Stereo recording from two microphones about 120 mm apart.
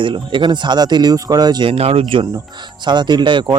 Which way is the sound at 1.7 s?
55° right (ahead or behind).